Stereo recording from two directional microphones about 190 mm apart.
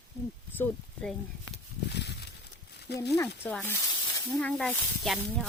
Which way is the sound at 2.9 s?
60° left (ahead or behind).